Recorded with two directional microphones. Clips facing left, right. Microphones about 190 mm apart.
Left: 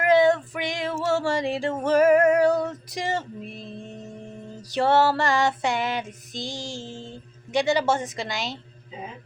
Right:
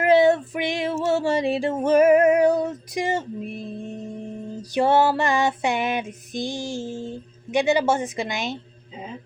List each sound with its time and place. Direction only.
0.0 s female singing: 25° right (ahead or behind)
4.7 s female singing: 15° right (ahead or behind)